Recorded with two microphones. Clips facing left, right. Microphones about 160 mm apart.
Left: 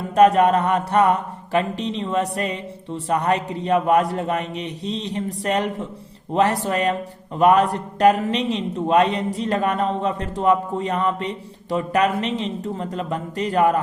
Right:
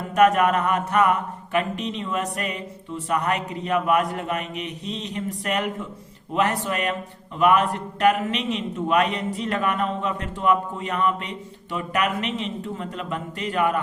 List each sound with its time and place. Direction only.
0.2 s a man's voice: 30° left (ahead or behind)